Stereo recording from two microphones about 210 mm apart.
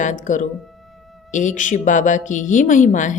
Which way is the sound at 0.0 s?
35° left (ahead or behind).